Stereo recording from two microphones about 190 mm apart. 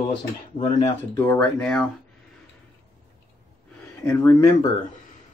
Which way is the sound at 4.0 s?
10° left (ahead or behind).